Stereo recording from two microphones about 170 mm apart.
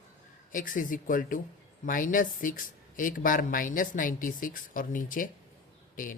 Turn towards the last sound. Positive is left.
turn(degrees=50)  # may be behind; listen again after turning